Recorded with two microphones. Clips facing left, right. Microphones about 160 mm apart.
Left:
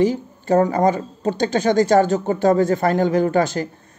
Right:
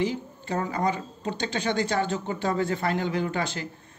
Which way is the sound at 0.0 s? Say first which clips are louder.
Left 9 dB; 45° left (ahead or behind).